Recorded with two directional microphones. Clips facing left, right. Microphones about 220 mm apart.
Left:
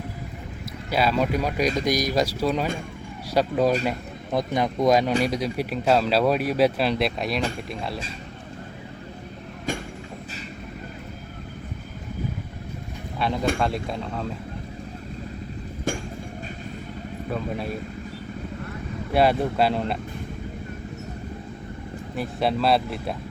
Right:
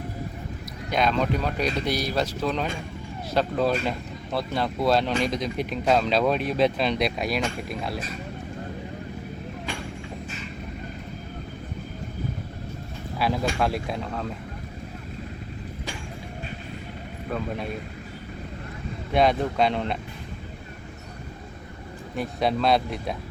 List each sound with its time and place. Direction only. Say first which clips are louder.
0.9 s speech: left 1 dB; 5° left (ahead or behind)
13.1 s speech: left 1 dB; 5° right (ahead or behind)
17.2 s speech: left 1 dB; centre (ahead or behind)
19.1 s speech: left 1 dB; 5° left (ahead or behind)
22.1 s speech: even; centre (ahead or behind)